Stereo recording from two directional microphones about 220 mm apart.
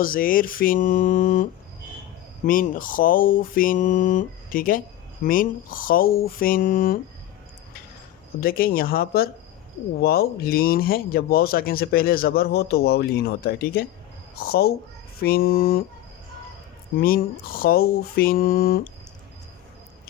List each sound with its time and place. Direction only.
0.0 s speech: 40° left (ahead or behind)
8.4 s speech: 40° left (ahead or behind)
17.0 s speech: 40° left (ahead or behind)